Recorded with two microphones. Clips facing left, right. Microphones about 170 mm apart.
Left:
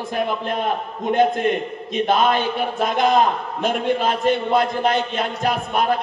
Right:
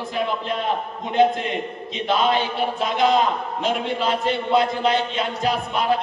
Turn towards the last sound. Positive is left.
turn(degrees=50)  # may be behind; listen again after turning